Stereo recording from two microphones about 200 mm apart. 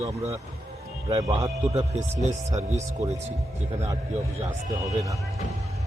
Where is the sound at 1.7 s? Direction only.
35° right (ahead or behind).